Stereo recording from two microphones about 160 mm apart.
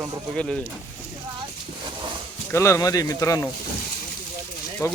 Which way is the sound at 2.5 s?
20° left (ahead or behind).